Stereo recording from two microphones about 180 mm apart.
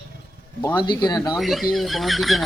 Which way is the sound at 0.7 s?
25° left (ahead or behind).